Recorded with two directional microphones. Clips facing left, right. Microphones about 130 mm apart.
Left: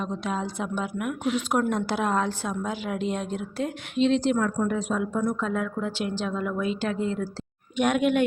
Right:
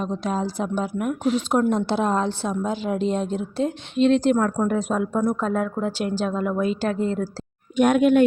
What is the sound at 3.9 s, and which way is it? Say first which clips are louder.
A woman's voice: right 4 dB; 50° right (ahead or behind).